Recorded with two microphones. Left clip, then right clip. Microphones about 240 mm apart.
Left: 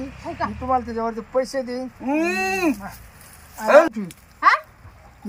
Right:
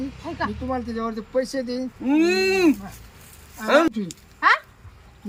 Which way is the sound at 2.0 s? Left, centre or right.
Centre.